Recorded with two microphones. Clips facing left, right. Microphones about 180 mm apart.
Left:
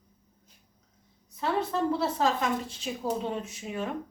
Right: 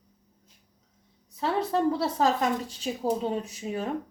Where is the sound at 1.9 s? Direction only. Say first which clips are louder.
Right 2 dB; 35° right (ahead or behind).